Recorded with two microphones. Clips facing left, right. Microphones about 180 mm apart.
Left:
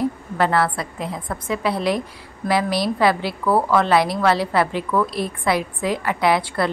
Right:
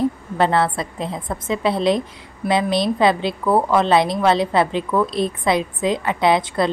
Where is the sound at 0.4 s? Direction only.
25° right (ahead or behind).